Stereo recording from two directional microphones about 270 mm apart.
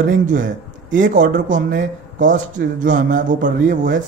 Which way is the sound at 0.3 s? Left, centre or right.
Right.